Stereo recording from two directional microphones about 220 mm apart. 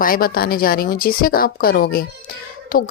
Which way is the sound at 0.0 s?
40° left (ahead or behind).